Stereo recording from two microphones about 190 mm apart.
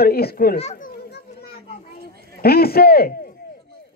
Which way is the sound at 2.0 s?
55° left (ahead or behind).